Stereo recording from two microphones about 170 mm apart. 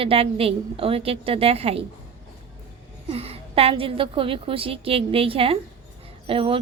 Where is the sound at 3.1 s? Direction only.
35° right (ahead or behind).